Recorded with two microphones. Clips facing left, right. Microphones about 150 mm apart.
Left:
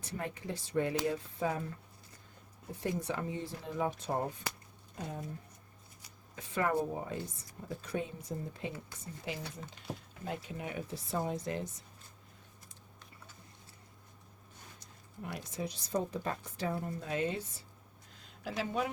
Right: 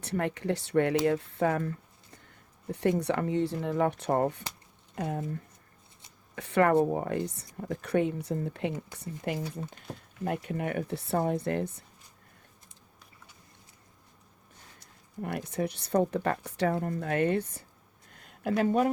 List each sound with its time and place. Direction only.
0.0 s speech: 70° right (ahead or behind)
2.7 s speech: 70° right (ahead or behind)
6.3 s speech: 65° right (ahead or behind)
15.2 s speech: 60° right (ahead or behind)
18.1 s a sound: 55° right (ahead or behind)